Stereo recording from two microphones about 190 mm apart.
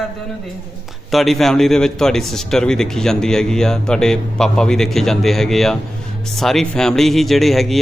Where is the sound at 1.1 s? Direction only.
Centre (ahead or behind).